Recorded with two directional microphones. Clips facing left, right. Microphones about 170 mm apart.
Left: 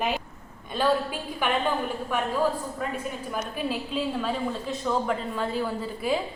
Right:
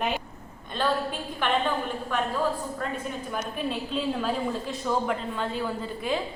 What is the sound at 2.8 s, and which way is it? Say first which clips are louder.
A woman's voice: left 1 dB; 10° left (ahead or behind).